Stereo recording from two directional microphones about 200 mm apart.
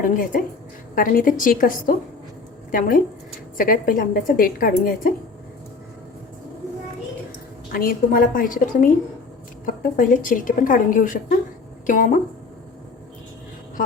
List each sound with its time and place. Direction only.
0.0 s a woman's voice: 45° left (ahead or behind)
7.7 s a woman's voice: 45° left (ahead or behind)